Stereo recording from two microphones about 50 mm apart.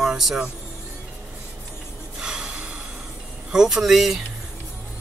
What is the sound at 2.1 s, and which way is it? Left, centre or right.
Snort, centre.